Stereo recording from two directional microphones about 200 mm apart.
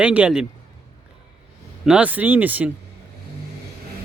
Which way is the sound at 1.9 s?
5° right (ahead or behind).